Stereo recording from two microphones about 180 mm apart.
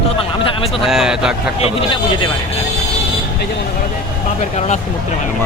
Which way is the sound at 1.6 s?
30° left (ahead or behind).